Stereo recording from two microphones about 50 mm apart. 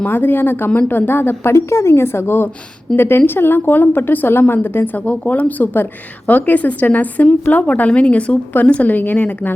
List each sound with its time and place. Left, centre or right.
0.0 s a woman's voice: left
1.5 s a woman's voice: left
4.9 s a woman's voice: left